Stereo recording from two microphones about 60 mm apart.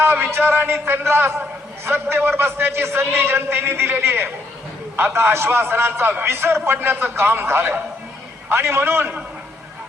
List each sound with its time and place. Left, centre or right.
0.0 s a man's voice: right